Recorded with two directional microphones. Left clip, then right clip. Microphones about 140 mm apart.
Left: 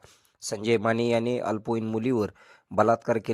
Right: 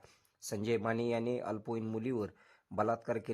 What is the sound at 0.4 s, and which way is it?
Speech, 40° left (ahead or behind).